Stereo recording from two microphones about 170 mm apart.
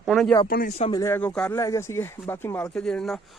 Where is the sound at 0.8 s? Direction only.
25° left (ahead or behind); by 1.5 s 5° left (ahead or behind).